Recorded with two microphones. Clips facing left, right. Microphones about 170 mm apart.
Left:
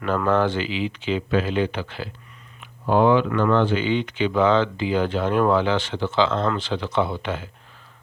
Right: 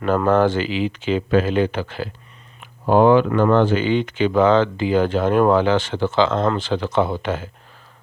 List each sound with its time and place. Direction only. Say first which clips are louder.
0.0 s speech: right 4 dB; 40° right (ahead or behind)